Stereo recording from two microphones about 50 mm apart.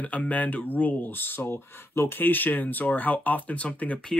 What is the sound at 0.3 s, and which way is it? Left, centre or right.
Speech, left.